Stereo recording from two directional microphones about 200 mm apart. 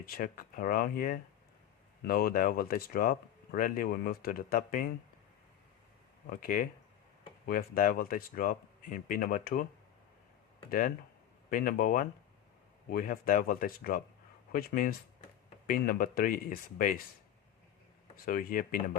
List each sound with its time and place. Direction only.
0.0 s speech: 45° left (ahead or behind)
6.4 s speech: 45° left (ahead or behind)
10.7 s speech: 45° left (ahead or behind)
18.3 s speech: 45° left (ahead or behind)